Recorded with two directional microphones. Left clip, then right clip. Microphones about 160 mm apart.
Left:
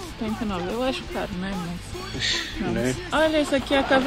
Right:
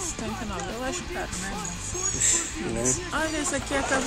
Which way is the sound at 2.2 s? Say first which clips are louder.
Left 5 dB; 20° right (ahead or behind).